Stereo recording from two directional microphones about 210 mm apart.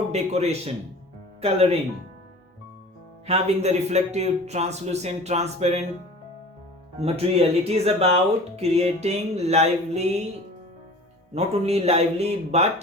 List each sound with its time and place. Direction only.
0.1 s speech: 30° right (ahead or behind)
3.2 s speech: 30° right (ahead or behind)
7.0 s speech: 30° right (ahead or behind)
11.3 s speech: 30° right (ahead or behind)